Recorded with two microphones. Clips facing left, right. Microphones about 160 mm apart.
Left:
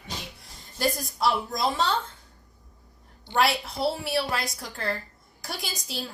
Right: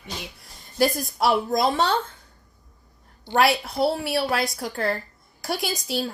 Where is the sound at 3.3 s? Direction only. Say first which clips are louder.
Right 4 dB; 60° right (ahead or behind).